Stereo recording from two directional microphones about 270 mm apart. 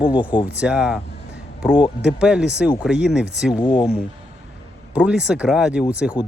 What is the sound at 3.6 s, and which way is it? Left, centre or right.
Speech, centre.